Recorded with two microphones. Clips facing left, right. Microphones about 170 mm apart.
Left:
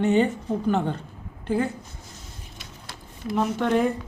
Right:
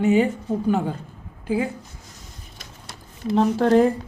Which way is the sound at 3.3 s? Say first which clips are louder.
Right 5 dB; 35° right (ahead or behind).